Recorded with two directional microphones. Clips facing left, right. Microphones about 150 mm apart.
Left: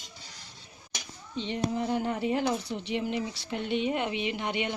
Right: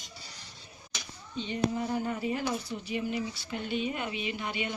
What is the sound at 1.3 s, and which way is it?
A woman's voice, 85° left.